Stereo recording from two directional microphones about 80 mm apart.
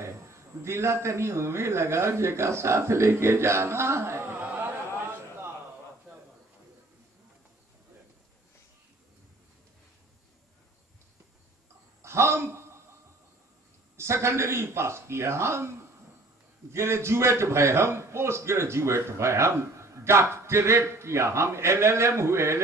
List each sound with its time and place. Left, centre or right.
0.0 s a man's voice: right
12.0 s a sound: right
13.9 s a man's voice: right
16.7 s a man's voice: right